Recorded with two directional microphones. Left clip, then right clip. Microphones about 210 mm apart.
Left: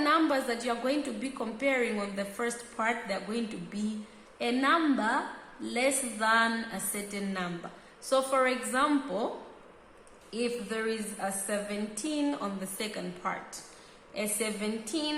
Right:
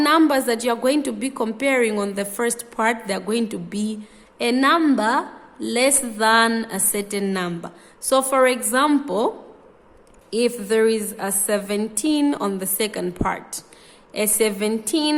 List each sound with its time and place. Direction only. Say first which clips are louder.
0.0 s a woman's voice: right 10 dB; 55° right (ahead or behind)
10.3 s a woman's voice: right 13 dB; 55° right (ahead or behind)